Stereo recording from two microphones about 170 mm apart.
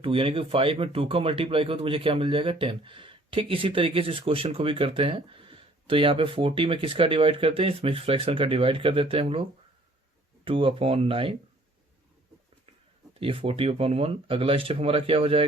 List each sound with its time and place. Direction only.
0.0 s speech: 30° right (ahead or behind)
13.1 s speech: 35° right (ahead or behind)